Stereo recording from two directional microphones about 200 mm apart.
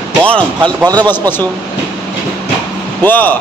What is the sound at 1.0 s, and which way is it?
Speech, 20° right (ahead or behind).